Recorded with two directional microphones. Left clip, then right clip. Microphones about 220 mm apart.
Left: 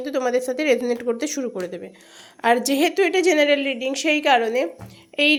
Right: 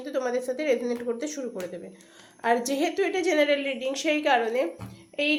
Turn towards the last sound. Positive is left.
turn(degrees=35)  # may be behind; listen again after turning